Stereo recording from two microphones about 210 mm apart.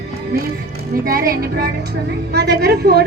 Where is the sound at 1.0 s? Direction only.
45° right (ahead or behind).